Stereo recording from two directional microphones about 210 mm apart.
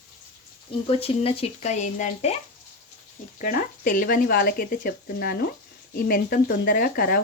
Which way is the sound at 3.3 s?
40° left (ahead or behind).